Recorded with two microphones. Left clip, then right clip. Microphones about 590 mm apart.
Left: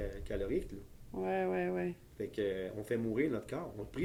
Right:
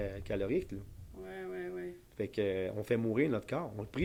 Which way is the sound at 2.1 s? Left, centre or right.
Right.